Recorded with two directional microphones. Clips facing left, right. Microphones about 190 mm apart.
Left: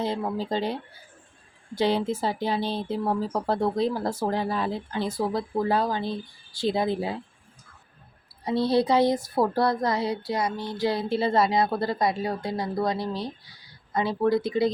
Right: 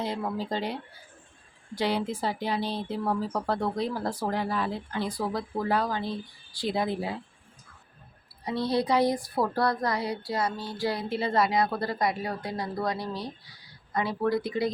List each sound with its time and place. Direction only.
0.0 s a woman's voice: 25° left (ahead or behind)
8.4 s a woman's voice: 30° left (ahead or behind)